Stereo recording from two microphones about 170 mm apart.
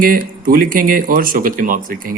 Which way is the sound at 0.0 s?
60° right (ahead or behind).